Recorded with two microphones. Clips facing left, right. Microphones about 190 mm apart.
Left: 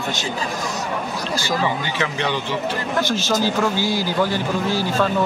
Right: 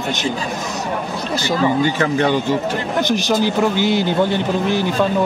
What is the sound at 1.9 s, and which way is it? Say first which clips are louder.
Speech: right 7 dB; 45° right (ahead or behind).